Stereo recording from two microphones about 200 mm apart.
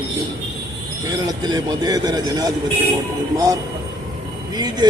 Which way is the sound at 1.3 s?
20° right (ahead or behind).